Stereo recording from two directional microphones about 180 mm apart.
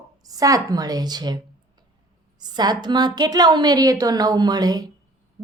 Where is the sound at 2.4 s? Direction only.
20° right (ahead or behind).